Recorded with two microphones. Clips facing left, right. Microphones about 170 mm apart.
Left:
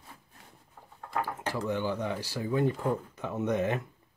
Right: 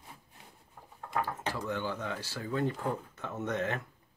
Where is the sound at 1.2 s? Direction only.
15° left (ahead or behind).